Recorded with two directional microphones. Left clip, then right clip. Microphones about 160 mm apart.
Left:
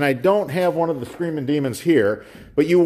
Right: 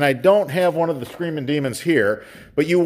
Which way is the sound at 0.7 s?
30° right (ahead or behind).